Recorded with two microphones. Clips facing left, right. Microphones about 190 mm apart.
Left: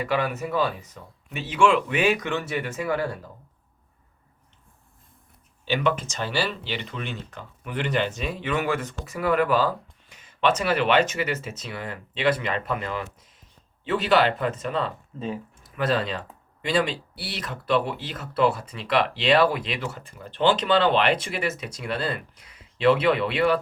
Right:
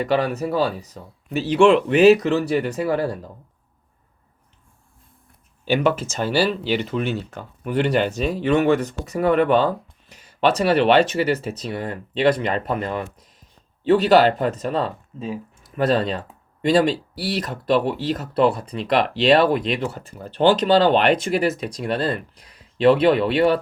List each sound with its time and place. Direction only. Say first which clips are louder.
0.0 s speech: right 5 dB; 35° right (ahead or behind)
5.6 s speech: right 5 dB; 45° right (ahead or behind)
15.2 s a sound: right 2 dB; 5° right (ahead or behind)
16.6 s speech: right 7 dB; 40° right (ahead or behind)
18.4 s speech: right 3 dB; centre (ahead or behind)
18.9 s speech: right 5 dB; 35° right (ahead or behind)